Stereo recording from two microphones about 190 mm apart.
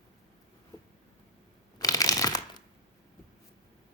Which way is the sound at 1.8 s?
20° left (ahead or behind).